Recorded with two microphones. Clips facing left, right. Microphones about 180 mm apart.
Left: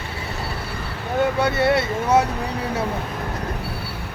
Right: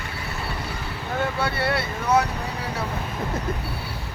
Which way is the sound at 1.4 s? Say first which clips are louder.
Left 6 dB; 20° left (ahead or behind).